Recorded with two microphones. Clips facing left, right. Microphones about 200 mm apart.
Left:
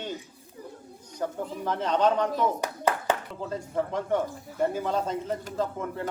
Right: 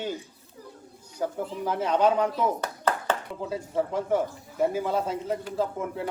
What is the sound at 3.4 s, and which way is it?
Speech, 5° right (ahead or behind).